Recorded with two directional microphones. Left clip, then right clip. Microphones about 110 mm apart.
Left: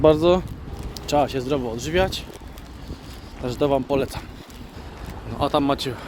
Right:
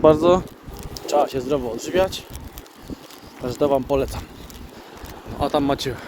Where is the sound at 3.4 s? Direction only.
10° left (ahead or behind).